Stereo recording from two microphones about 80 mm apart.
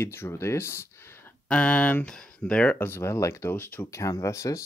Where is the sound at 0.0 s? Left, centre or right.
Left.